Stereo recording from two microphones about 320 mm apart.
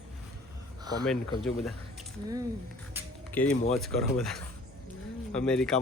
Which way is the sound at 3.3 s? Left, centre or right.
Centre.